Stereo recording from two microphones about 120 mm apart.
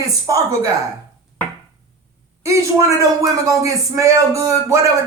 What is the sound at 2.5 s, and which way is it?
A woman's voice, 25° right (ahead or behind).